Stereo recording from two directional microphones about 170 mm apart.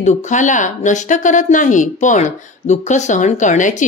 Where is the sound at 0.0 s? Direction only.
45° left (ahead or behind).